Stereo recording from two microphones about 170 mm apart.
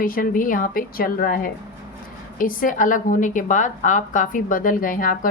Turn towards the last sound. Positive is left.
turn(degrees=55)  # may be behind; listen again after turning